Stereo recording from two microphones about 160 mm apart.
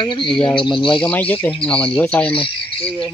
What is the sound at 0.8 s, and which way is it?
Speech, 5° left (ahead or behind).